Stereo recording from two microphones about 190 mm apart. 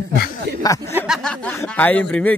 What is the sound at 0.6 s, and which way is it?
Speech, 15° left (ahead or behind).